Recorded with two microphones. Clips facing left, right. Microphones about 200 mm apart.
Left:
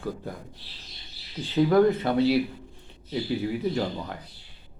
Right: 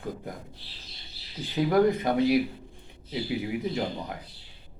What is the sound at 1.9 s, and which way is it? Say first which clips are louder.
Speech: left 1 dB; 15° right (ahead or behind).